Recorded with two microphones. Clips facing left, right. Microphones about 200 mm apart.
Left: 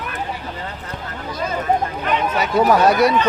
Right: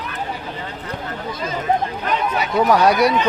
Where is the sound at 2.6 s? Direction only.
Centre (ahead or behind).